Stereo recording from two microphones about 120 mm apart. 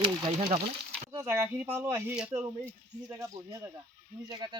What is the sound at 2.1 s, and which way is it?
Speech, 10° right (ahead or behind).